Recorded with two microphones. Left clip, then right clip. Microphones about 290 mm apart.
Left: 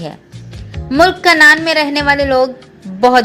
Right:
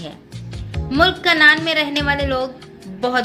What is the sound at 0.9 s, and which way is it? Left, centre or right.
A woman's voice, left.